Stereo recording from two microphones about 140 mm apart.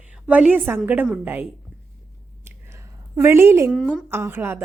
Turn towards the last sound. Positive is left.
turn(degrees=-15)  # may be behind; listen again after turning